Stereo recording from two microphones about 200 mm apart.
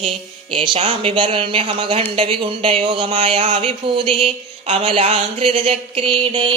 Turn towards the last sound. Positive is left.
turn(degrees=-25)  # may be behind; listen again after turning